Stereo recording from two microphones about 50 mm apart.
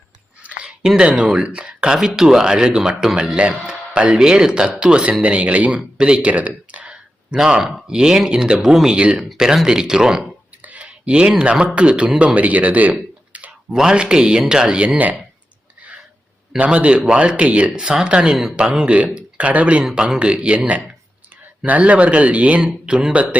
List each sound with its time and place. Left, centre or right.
0.6 s a man's voice: centre
6.1 s a sound: right
7.3 s speech: centre
9.0 s a man's voice: right
10.6 s speech: right
13.7 s a man's voice: centre; by 15.1 s right
16.6 s a man's voice: right
19.8 s a man's voice: centre
21.7 s a man's voice: right